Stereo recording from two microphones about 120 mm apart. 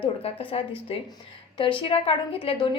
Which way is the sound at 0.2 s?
55° left (ahead or behind).